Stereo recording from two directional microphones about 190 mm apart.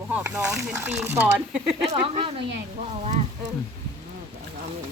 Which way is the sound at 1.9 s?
30° right (ahead or behind).